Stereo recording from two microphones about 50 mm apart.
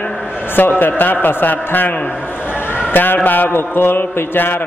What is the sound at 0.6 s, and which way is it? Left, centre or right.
A man's voice, left.